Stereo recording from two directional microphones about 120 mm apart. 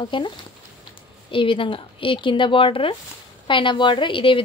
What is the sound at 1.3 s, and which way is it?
A woman's voice, 45° left (ahead or behind).